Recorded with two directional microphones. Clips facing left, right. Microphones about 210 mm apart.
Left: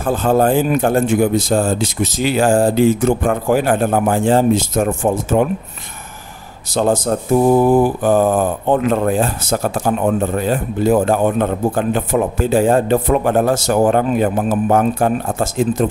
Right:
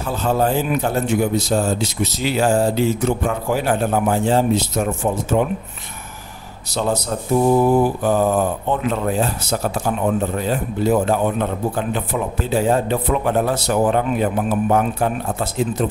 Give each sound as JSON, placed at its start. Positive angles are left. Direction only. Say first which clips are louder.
{"t": 0.0, "sound": "a man's voice", "louder": "left 5 dB", "side_deg": 50}
{"t": 6.7, "sound": "a man's voice", "louder": "left 6 dB", "side_deg": 50}